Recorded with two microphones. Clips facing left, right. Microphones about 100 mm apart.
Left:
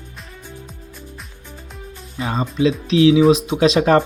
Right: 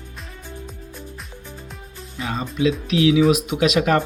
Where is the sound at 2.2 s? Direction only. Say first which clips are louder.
Left 3 dB; 35° left (ahead or behind).